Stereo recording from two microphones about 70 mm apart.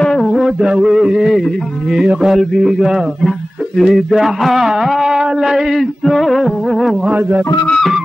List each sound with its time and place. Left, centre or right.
0.0 s a sound: centre
0.6 s a man's voice: centre
7.1 s speech: right